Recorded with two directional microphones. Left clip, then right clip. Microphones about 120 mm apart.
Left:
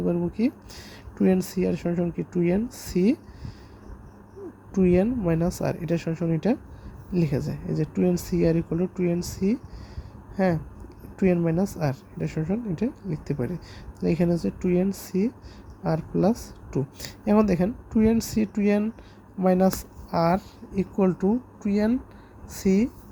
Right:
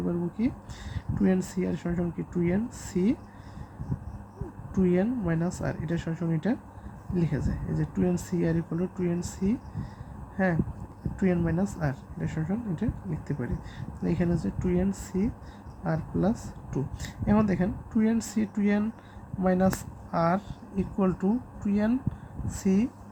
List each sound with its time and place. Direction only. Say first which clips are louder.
0.1 s speech: left 4 dB; 40° left (ahead or behind)
4.7 s speech: left 5 dB; 40° left (ahead or behind)